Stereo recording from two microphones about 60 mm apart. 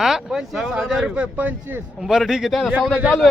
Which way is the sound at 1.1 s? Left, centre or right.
Right.